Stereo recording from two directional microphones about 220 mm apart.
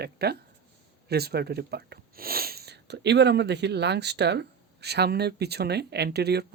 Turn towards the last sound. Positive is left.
turn(degrees=-50)  # may be behind; listen again after turning